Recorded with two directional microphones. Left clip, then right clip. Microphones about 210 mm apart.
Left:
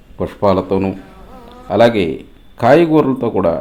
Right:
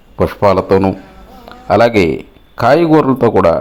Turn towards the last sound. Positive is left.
turn(degrees=-20)  # may be behind; listen again after turning